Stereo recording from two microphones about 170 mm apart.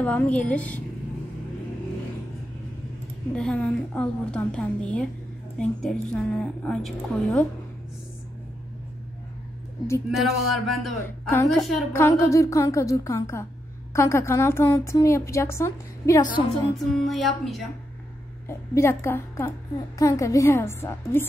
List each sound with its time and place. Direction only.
0.0 s a woman's voice: 10° left (ahead or behind)
3.3 s a woman's voice: 5° left (ahead or behind)
10.1 s a woman's voice: centre (ahead or behind)
11.9 s a woman's voice: 15° left (ahead or behind)
16.7 s a woman's voice: centre (ahead or behind)
18.5 s a woman's voice: 15° left (ahead or behind)